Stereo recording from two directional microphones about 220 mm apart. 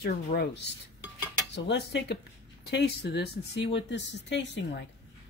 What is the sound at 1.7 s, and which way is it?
Speech, 50° left (ahead or behind).